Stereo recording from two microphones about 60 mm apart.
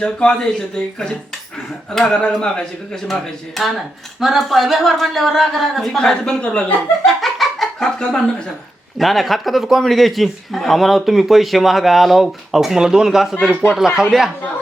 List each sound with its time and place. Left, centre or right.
0.0 s speech: centre
1.9 s a man's voice: centre
6.0 s speech: centre
7.0 s a sound: centre
9.0 s a man's voice: centre